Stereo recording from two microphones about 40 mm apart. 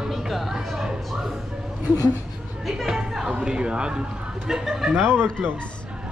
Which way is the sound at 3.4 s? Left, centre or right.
Right.